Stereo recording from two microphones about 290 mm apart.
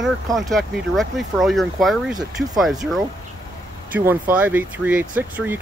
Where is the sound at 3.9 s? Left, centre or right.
Centre.